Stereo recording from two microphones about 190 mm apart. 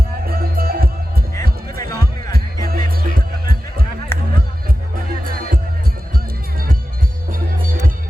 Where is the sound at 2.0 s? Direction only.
50° right (ahead or behind).